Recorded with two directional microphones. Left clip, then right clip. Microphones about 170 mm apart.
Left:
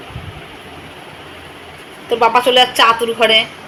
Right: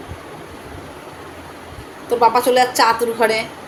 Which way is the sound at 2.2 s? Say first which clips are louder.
Left 3 dB; 10° left (ahead or behind).